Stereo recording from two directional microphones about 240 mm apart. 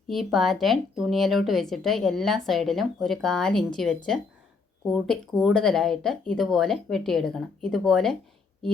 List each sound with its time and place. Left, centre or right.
0.1 s speech: centre